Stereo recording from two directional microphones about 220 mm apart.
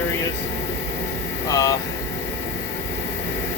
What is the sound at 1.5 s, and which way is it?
Speech, 15° left (ahead or behind).